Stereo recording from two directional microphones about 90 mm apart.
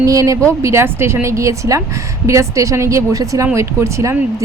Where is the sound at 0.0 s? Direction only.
40° right (ahead or behind).